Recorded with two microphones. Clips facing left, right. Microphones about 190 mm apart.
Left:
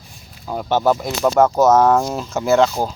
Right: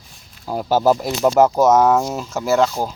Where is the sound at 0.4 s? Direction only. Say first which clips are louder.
Right 1 dB; 5° right (ahead or behind).